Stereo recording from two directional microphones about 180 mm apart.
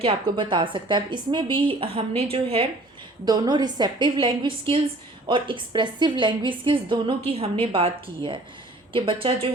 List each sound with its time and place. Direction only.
0.0 s a woman's voice: 30° right (ahead or behind)